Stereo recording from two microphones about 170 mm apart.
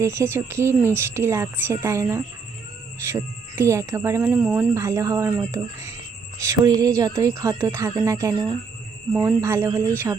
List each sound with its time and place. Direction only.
0.0 s speech: 15° right (ahead or behind)